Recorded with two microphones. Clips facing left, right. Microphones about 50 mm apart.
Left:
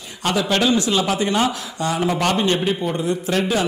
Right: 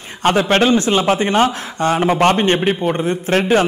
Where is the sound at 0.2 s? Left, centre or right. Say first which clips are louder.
Right 5 dB; right.